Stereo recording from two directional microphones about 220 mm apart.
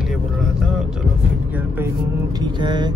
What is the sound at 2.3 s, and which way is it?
Speech, 20° right (ahead or behind).